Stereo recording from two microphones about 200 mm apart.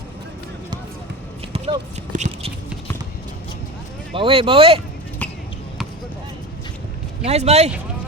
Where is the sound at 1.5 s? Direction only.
30° right (ahead or behind).